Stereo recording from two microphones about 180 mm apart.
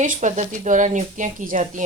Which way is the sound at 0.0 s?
45° right (ahead or behind).